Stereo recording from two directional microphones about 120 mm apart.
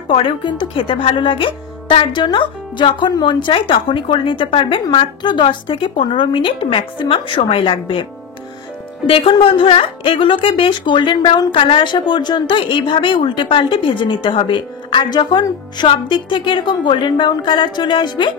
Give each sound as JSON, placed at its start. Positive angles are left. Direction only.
{"t": 0.1, "sound": "a woman's voice", "side_deg": 45}